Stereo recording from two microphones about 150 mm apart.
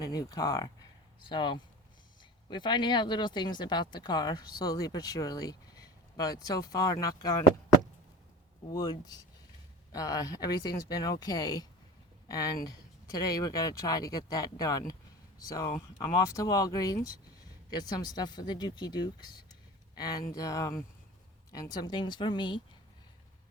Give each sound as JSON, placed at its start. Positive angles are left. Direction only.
{"t": 0.1, "sound": "speech", "side_deg": 25}
{"t": 8.7, "sound": "speech", "side_deg": 25}